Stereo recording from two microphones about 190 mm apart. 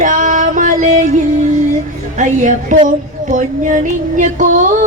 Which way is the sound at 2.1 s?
40° right (ahead or behind).